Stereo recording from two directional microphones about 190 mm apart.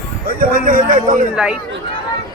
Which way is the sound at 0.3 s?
50° right (ahead or behind).